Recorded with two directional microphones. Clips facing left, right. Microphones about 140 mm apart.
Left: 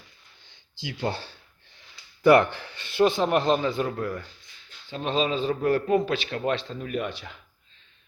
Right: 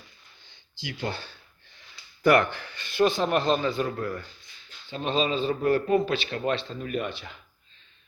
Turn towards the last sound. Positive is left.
turn(degrees=0)  # may be behind; listen again after turning